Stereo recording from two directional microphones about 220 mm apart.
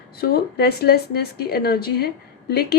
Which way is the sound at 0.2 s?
45° left (ahead or behind).